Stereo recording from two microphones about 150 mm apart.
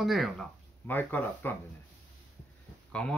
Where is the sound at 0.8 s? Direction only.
10° left (ahead or behind).